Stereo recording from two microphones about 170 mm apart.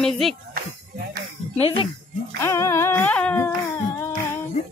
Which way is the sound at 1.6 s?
30° left (ahead or behind).